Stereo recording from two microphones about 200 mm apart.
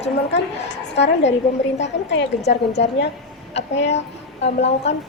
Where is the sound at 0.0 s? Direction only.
60° left (ahead or behind).